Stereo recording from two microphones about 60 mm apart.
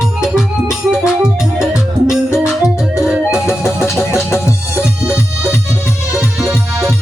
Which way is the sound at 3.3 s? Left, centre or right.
Left.